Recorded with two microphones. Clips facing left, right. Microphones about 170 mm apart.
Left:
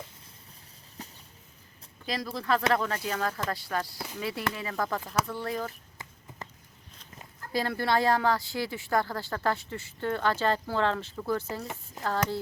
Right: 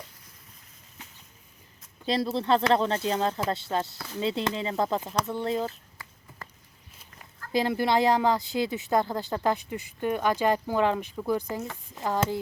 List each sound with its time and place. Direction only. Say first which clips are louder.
1.0 s a sound: left 5 dB; 35° left (ahead or behind)
2.0 s speech: right 5 dB; 25° right (ahead or behind)
3.9 s speech: right 1 dB; 15° left (ahead or behind)
4.2 s speech: right 5 dB; 25° right (ahead or behind)
6.0 s a sound: left 2 dB; 25° left (ahead or behind)
7.5 s speech: right 3 dB; 20° right (ahead or behind)